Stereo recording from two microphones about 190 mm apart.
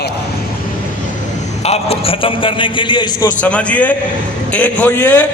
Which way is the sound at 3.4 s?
5° left (ahead or behind).